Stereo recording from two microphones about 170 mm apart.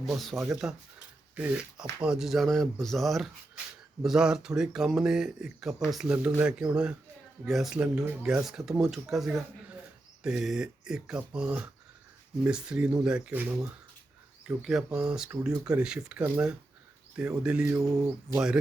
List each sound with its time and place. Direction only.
0.0 s speech: centre (ahead or behind)
17.7 s bird: 15° right (ahead or behind)
18.3 s speech: 5° right (ahead or behind)